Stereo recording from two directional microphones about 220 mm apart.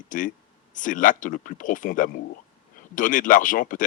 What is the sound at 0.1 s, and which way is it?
Speech, 35° left (ahead or behind).